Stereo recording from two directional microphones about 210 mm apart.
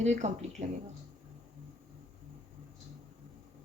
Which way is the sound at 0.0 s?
35° right (ahead or behind).